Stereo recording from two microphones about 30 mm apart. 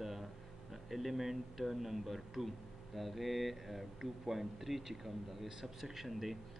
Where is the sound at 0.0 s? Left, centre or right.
Centre.